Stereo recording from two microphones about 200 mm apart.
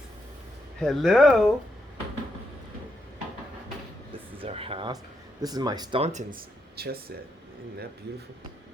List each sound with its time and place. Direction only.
0.8 s speech: centre (ahead or behind)
4.4 s speech: 30° right (ahead or behind)
6.7 s speech: 50° right (ahead or behind)